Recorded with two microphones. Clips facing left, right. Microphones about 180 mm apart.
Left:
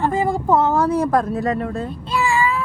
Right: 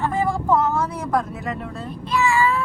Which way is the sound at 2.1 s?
30° left (ahead or behind).